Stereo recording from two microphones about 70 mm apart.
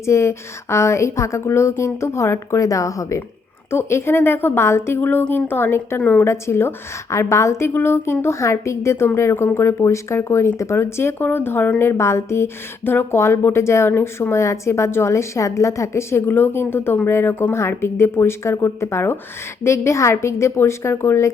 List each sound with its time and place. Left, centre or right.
0.0 s a woman's voice: left
3.7 s speech: left
7.7 s a woman's voice: left